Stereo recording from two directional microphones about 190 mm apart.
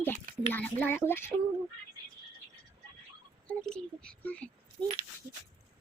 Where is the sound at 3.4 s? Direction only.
5° left (ahead or behind).